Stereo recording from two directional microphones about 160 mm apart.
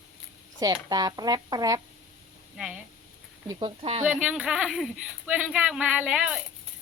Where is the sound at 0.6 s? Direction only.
25° right (ahead or behind).